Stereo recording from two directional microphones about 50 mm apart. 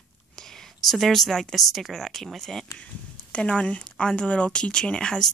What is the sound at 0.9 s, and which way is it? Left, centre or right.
A woman's voice, centre.